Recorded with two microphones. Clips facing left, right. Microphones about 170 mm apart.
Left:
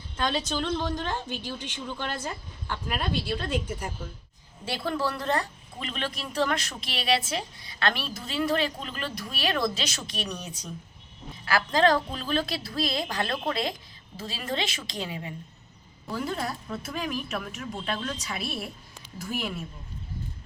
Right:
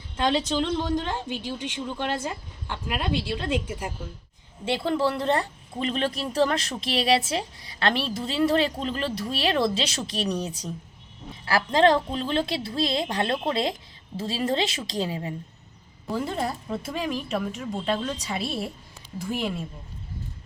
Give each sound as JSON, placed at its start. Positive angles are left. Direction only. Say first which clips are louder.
{"t": 0.2, "sound": "a woman's voice", "louder": "right 5 dB", "side_deg": -25}